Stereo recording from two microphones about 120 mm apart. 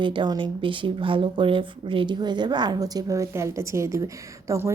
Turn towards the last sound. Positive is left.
turn(degrees=-25)  # may be behind; listen again after turning